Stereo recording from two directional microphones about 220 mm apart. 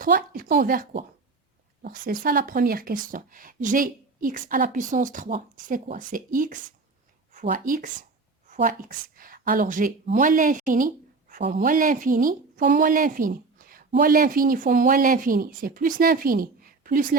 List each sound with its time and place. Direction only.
0.0 s a woman's voice: 40° right (ahead or behind)